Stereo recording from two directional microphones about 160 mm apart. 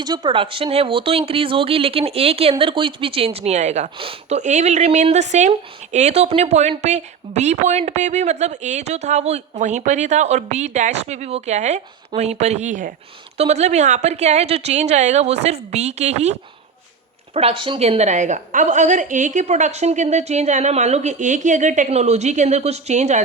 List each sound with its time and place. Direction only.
0.0 s speech: 25° right (ahead or behind); by 3.9 s 45° right (ahead or behind)
3.9 s speech: 35° right (ahead or behind)
4.4 s speech: 50° right (ahead or behind)
17.3 s speech: 35° right (ahead or behind)